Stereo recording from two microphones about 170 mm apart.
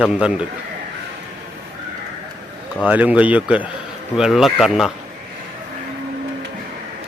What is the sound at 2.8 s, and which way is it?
Speech, 10° right (ahead or behind).